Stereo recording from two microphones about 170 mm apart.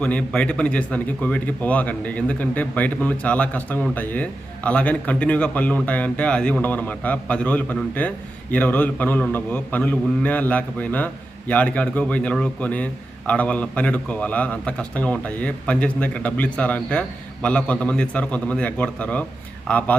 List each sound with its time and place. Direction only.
0.0 s speech: 10° left (ahead or behind)